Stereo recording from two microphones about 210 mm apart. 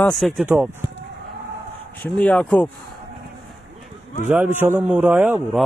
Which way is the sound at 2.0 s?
5° left (ahead or behind).